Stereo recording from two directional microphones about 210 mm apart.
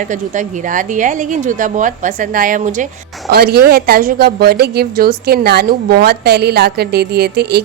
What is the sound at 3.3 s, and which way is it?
A woman's voice, 50° right (ahead or behind).